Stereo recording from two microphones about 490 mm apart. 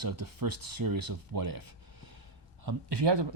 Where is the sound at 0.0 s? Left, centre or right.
Right.